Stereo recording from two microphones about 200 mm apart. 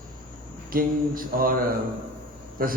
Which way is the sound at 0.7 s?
45° right (ahead or behind).